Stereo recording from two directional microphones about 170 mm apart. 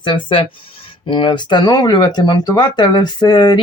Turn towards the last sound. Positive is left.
turn(degrees=25)  # may be behind; listen again after turning